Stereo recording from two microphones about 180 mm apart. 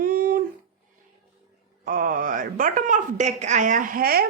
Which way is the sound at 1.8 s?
50° right (ahead or behind).